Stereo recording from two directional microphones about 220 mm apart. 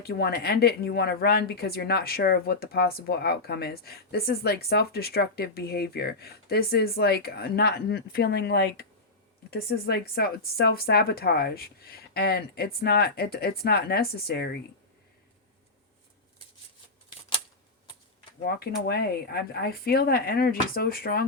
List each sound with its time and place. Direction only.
0.0 s speech: 45° left (ahead or behind)
18.4 s speech: 45° left (ahead or behind)